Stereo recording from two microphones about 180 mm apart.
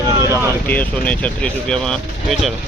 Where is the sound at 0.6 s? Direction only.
10° left (ahead or behind).